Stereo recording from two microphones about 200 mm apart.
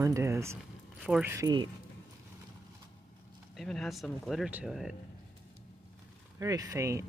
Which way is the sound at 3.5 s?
Centre (ahead or behind).